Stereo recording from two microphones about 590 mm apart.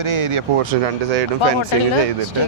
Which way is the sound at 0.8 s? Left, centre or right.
Right.